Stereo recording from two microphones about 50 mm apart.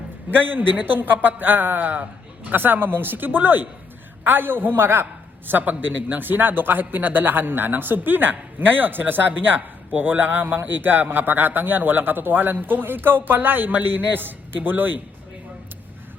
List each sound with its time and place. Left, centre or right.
0.3 s a man's voice: right